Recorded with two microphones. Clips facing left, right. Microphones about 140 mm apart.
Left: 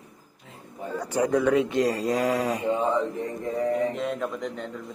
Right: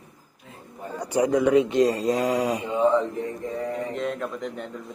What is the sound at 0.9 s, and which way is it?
Speech, 15° right (ahead or behind).